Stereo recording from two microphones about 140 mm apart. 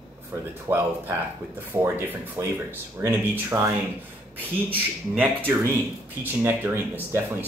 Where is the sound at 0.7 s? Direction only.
20° right (ahead or behind).